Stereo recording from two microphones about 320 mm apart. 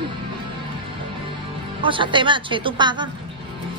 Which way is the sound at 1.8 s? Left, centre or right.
Centre.